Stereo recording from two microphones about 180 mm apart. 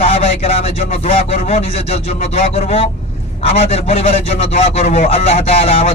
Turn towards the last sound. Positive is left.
turn(degrees=35)  # may be behind; listen again after turning